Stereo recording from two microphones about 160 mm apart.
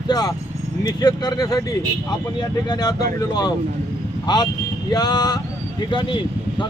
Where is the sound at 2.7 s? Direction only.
25° left (ahead or behind).